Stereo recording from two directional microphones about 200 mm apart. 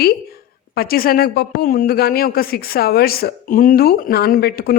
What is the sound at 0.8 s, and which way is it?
Speech, 50° left (ahead or behind).